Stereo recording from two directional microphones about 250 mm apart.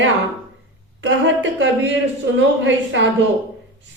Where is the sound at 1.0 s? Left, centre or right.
Right.